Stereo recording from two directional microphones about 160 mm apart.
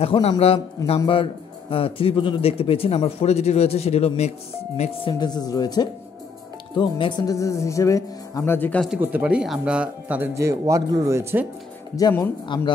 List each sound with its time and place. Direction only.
0.0 s a man's voice: 40° left (ahead or behind)
5.2 s a man's voice: 25° left (ahead or behind)
9.0 s speech: 10° right (ahead or behind)
12.0 s a man's voice: 25° left (ahead or behind)